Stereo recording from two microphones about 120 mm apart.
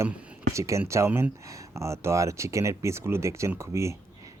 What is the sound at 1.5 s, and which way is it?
Speech, 25° right (ahead or behind).